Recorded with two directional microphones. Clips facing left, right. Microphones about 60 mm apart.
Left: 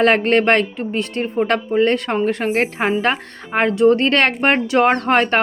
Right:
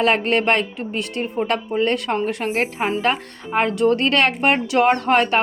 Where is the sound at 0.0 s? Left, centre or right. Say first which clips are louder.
Left 4 dB; left.